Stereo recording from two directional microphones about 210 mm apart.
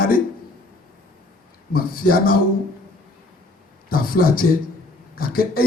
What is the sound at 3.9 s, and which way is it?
A man's voice, 45° left (ahead or behind).